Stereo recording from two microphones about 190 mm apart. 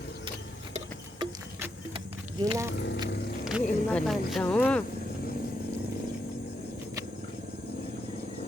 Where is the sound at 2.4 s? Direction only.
15° right (ahead or behind).